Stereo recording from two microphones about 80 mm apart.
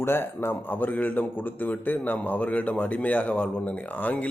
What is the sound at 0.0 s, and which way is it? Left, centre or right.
A man's voice, left.